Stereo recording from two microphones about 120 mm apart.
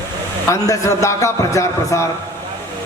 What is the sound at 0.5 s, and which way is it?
A man's voice, 25° left (ahead or behind).